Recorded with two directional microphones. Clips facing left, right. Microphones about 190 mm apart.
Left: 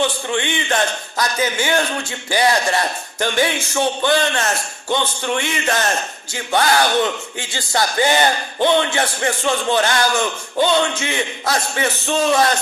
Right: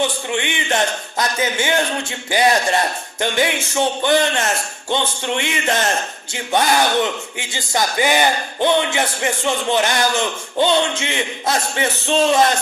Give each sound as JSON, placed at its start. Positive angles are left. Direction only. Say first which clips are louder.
{"t": 0.0, "sound": "speech", "louder": "left 1 dB", "side_deg": -15}